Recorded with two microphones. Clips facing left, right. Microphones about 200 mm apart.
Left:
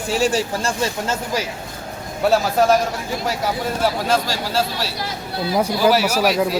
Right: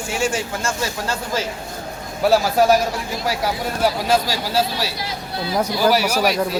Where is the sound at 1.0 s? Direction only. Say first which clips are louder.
Left 1 dB; 20° left (ahead or behind).